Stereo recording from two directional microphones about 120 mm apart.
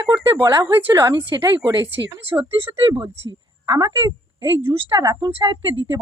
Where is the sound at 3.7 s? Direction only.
30° right (ahead or behind).